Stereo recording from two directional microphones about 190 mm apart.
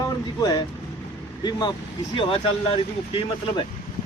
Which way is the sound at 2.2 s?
30° left (ahead or behind).